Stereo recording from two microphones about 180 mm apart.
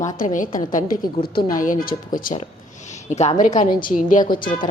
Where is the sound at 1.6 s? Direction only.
50° left (ahead or behind).